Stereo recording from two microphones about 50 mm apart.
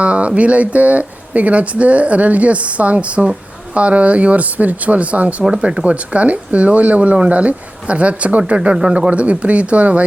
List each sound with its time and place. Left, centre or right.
0.0 s speech: right
5.4 s speech: centre